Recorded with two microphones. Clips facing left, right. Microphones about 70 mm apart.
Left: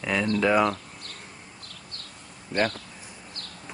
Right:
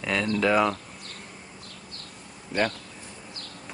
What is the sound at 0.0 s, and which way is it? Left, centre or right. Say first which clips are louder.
Speech: left 1 dB; centre.